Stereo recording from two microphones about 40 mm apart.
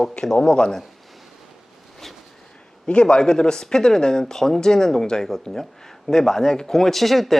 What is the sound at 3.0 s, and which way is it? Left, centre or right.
Speech, centre.